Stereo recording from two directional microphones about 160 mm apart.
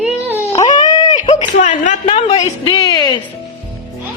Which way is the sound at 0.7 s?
25° left (ahead or behind).